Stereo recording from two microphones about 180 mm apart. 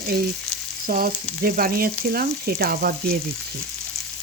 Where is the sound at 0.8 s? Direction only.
50° right (ahead or behind).